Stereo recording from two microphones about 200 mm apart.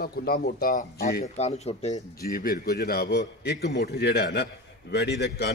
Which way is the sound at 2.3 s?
50° left (ahead or behind).